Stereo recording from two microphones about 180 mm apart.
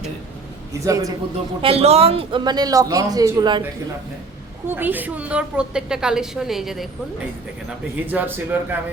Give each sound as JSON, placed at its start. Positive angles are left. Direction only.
{"t": 0.7, "sound": "speech", "side_deg": -15}
{"t": 1.6, "sound": "speech", "side_deg": -35}
{"t": 4.7, "sound": "a woman's voice", "side_deg": -10}
{"t": 8.0, "sound": "speech", "side_deg": -10}